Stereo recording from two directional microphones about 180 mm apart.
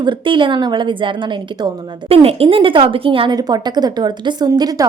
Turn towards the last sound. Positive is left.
turn(degrees=-20)  # may be behind; listen again after turning